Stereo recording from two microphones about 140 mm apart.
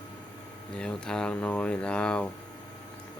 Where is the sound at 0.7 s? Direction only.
5° left (ahead or behind).